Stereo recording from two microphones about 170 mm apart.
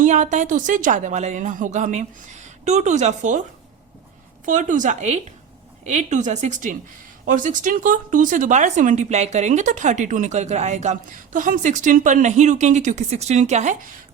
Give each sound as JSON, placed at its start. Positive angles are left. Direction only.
{"t": 0.0, "sound": "speech", "side_deg": -45}
{"t": 4.4, "sound": "speech", "side_deg": -50}